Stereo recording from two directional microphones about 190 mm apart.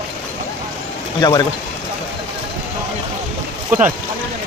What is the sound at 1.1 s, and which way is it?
Speech, 20° left (ahead or behind).